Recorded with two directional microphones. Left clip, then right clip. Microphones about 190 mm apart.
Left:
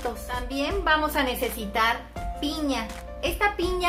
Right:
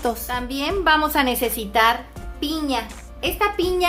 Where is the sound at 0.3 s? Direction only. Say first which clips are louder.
Right 4 dB; 25° right (ahead or behind).